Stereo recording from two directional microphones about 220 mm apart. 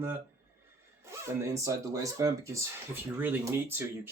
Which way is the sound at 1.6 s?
15° right (ahead or behind).